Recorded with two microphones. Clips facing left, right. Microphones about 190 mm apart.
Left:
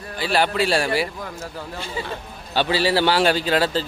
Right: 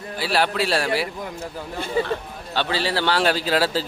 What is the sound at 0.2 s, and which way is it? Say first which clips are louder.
Speech: left 2 dB; centre (ahead or behind).